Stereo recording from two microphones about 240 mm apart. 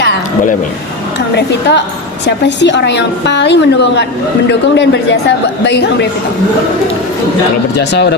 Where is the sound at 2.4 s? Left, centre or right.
Left.